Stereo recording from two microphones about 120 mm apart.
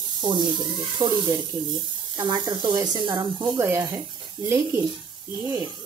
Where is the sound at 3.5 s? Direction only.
25° right (ahead or behind).